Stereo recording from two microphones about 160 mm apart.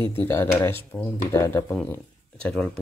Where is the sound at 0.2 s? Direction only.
15° left (ahead or behind).